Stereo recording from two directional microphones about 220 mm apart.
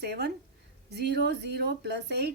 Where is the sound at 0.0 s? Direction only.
50° right (ahead or behind).